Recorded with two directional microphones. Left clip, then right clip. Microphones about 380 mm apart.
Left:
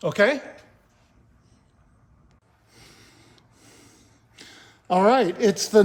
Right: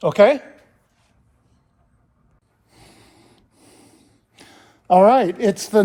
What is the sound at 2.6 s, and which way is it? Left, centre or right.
Snort, centre.